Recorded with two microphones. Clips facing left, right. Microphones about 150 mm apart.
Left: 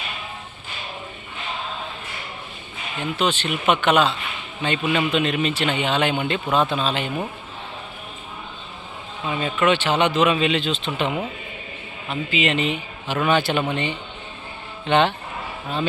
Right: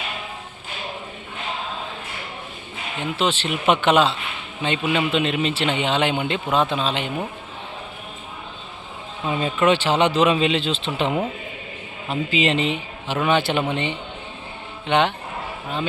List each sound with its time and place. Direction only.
3.0 s a man's voice: 30° right (ahead or behind)
9.2 s a man's voice: 20° right (ahead or behind)
14.8 s speech: 15° right (ahead or behind)